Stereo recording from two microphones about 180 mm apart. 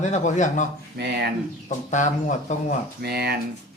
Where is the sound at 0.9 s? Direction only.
70° right (ahead or behind).